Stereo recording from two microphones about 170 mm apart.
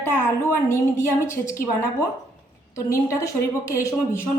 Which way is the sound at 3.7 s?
15° left (ahead or behind).